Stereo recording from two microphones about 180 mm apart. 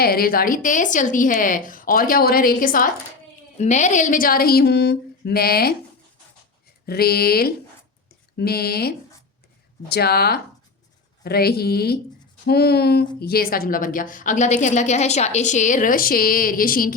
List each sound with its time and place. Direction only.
0.0 s a woman's voice: 55° left (ahead or behind)
3.6 s speech: 40° left (ahead or behind); by 5.7 s 60° left (ahead or behind)
6.8 s a woman's voice: 60° left (ahead or behind)